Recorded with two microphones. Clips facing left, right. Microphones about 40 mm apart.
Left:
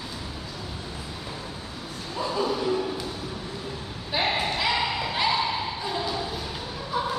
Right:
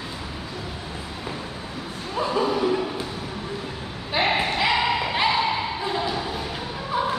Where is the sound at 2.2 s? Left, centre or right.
Right.